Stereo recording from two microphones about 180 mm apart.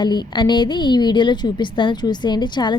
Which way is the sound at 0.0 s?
25° left (ahead or behind).